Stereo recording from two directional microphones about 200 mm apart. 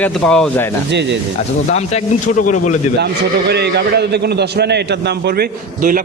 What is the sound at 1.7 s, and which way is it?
Speech, 35° left (ahead or behind).